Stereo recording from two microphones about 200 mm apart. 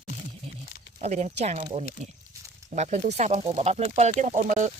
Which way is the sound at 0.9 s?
35° right (ahead or behind).